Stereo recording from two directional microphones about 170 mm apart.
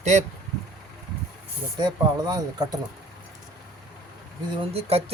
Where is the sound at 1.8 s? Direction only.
25° right (ahead or behind).